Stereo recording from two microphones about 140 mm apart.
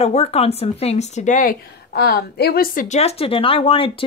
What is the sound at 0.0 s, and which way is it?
A woman's voice, 45° left (ahead or behind).